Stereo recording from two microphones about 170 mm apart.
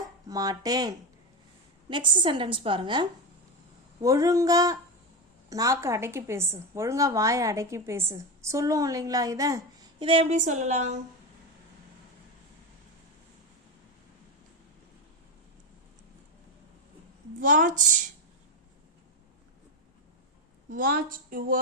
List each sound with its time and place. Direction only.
0.3 s a woman's voice: 20° right (ahead or behind)
10.0 s speech: 30° right (ahead or behind)
10.3 s a woman's voice: 45° right (ahead or behind)
17.4 s a woman's voice: 50° right (ahead or behind)
20.7 s a woman's voice: 55° right (ahead or behind)